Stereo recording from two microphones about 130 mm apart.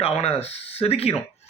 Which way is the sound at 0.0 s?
50° left (ahead or behind).